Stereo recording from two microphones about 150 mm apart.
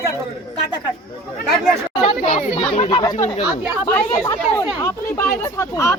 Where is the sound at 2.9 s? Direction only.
25° left (ahead or behind).